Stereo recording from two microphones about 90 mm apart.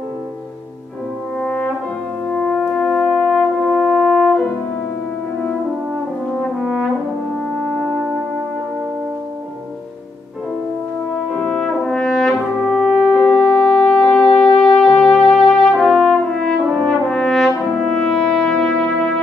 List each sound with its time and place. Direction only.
1.4 s brass instrument: 20° left (ahead or behind)
2.3 s french horn: 10° left (ahead or behind)
3.2 s brass instrument: 10° left (ahead or behind)
6.6 s brass instrument: centre (ahead or behind)
11.3 s brass instrument: 10° left (ahead or behind)
13.2 s music: 10° left (ahead or behind)
14.6 s brass instrument: 10° left (ahead or behind)